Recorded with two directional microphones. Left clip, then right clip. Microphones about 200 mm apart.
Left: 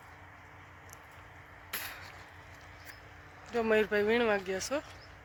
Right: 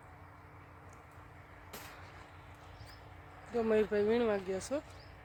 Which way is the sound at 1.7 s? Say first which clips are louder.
Left 9 dB; centre (ahead or behind).